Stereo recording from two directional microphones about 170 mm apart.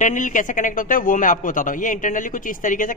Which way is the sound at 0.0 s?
50° left (ahead or behind).